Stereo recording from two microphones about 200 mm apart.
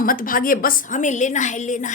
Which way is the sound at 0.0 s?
45° left (ahead or behind).